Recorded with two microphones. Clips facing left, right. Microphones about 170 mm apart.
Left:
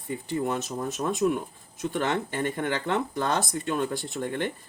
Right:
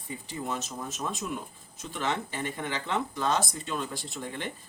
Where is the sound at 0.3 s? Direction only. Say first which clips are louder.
Left 7 dB; 60° left (ahead or behind).